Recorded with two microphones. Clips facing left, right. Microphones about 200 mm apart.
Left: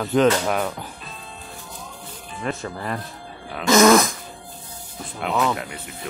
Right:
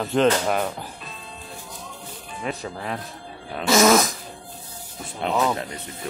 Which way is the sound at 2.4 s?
5° right (ahead or behind).